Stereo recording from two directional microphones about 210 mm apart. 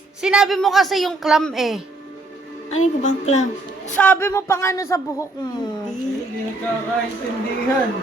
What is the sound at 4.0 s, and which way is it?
Speech, 10° left (ahead or behind).